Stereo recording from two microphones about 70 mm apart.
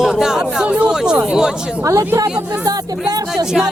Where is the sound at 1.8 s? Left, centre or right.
Right.